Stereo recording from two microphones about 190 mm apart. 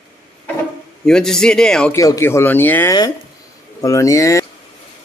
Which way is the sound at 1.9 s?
15° left (ahead or behind).